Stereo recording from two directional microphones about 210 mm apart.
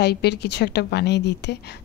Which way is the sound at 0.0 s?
50° left (ahead or behind).